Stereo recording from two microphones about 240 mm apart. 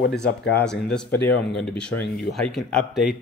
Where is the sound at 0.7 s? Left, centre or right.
Centre.